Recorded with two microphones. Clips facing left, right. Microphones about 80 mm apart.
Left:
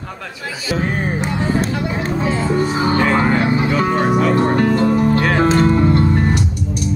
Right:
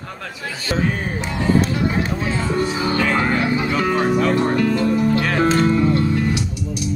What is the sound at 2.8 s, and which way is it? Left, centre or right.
Music, left.